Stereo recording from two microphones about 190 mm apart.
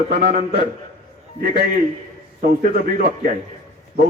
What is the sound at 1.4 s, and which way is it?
A man's voice, 55° right (ahead or behind).